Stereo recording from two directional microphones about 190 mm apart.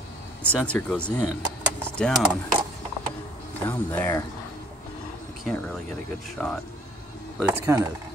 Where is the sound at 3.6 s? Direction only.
10° left (ahead or behind).